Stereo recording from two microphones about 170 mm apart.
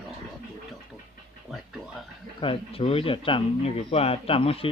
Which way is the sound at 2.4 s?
30° left (ahead or behind).